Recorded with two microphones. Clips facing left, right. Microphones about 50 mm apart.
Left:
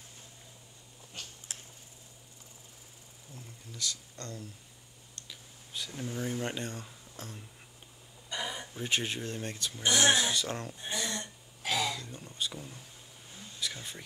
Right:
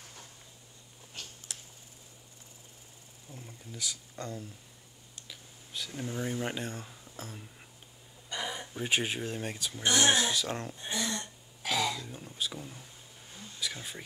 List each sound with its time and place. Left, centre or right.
1.5 s tick: left
3.4 s speech: centre
5.1 s a sound: centre
8.8 s speech: centre
11.1 s throat clearing: centre
13.3 s a sound: centre